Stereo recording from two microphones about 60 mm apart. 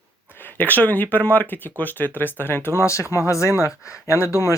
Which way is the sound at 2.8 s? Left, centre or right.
Left.